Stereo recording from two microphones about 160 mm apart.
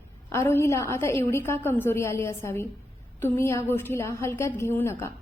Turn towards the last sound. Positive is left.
turn(degrees=15)  # may be behind; listen again after turning